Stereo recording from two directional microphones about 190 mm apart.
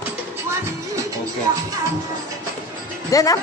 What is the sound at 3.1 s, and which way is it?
Speech, 20° left (ahead or behind).